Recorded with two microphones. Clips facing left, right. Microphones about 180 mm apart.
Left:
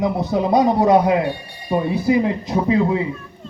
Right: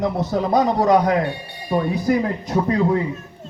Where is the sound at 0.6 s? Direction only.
10° left (ahead or behind).